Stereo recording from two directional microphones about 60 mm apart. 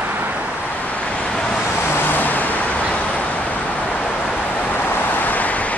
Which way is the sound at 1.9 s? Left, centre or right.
Left.